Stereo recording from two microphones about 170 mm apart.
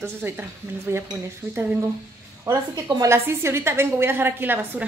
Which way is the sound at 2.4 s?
15° right (ahead or behind).